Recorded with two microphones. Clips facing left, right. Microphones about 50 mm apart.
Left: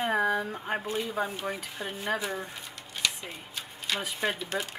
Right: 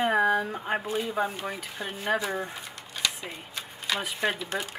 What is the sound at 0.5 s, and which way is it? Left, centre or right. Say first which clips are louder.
Speech: right 2 dB; centre.